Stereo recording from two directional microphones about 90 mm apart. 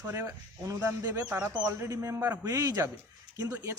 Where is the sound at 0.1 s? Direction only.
35° right (ahead or behind).